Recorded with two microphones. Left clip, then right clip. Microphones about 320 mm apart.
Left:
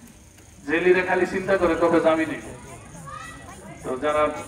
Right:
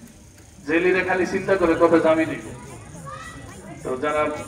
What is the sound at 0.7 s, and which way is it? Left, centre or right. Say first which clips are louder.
A man's voice: even; left.